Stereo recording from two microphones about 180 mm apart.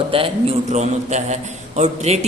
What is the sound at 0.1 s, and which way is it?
A man's voice, 30° right (ahead or behind).